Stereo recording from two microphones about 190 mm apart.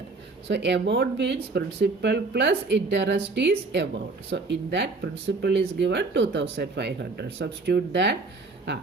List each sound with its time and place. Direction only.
0.4 s speech: 65° right (ahead or behind)